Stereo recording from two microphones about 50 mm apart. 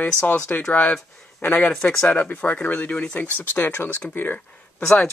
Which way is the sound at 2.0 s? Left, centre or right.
Left.